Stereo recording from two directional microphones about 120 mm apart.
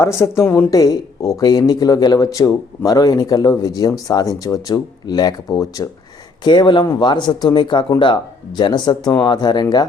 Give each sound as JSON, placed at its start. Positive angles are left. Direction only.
{"t": 0.0, "sound": "a woman's voice", "side_deg": 25}